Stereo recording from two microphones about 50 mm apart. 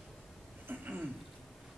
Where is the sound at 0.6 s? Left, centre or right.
Right.